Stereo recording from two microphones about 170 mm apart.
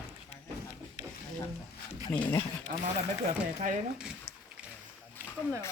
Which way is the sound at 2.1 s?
15° left (ahead or behind).